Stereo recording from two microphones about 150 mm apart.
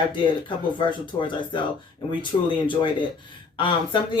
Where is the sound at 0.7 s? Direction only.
35° left (ahead or behind).